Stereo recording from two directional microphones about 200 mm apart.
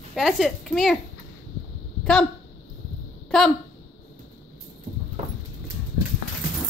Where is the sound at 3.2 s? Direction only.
5° left (ahead or behind).